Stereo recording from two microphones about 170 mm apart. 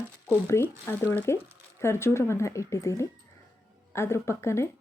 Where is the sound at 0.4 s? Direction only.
15° left (ahead or behind).